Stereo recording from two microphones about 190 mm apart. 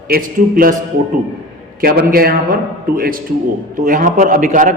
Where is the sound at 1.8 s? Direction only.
50° right (ahead or behind).